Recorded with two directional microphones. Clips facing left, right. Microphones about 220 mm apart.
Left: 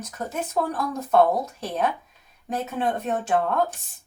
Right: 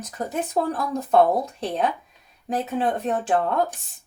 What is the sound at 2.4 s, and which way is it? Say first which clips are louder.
Speech: right 2 dB; 30° right (ahead or behind).